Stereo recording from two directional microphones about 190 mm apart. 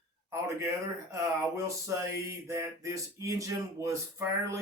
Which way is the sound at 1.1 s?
15° right (ahead or behind).